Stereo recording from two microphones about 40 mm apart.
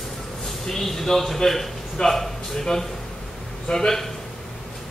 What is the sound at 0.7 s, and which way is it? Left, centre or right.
A man's voice, centre.